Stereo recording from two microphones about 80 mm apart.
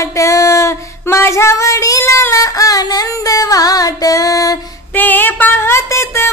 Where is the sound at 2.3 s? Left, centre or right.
Left.